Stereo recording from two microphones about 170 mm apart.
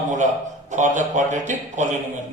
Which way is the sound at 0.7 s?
45° right (ahead or behind).